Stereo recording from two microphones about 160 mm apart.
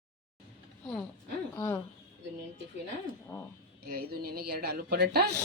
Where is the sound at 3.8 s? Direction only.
70° right (ahead or behind); by 5.2 s 85° right.